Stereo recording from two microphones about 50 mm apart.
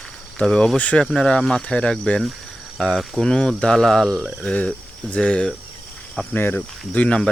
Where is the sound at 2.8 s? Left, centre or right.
Centre.